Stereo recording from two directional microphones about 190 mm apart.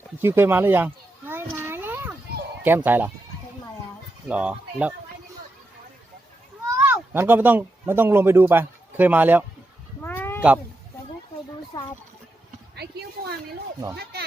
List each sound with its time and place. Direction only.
0.2 s speech: 10° right (ahead or behind)
1.3 s a sound: 10° right (ahead or behind)
2.6 s speech: 10° right (ahead or behind)
4.3 s speech: 5° right (ahead or behind)
6.7 s speech: 10° right (ahead or behind)
10.0 s cat: 10° left (ahead or behind)
12.7 s a sound: 60° right (ahead or behind)